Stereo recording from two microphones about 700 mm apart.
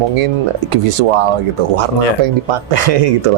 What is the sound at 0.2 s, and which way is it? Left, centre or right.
Speech, right.